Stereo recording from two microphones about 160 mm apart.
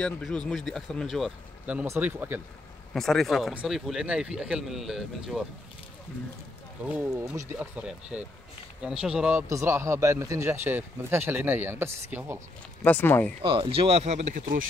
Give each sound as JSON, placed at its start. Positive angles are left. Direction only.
{"t": 0.0, "sound": "speech", "side_deg": 5}
{"t": 1.7, "sound": "speech", "side_deg": -10}
{"t": 2.9, "sound": "speech", "side_deg": 0}
{"t": 6.9, "sound": "speech", "side_deg": -10}
{"t": 9.5, "sound": "speech", "side_deg": -20}
{"t": 12.8, "sound": "speech", "side_deg": 10}
{"t": 13.4, "sound": "speech", "side_deg": -30}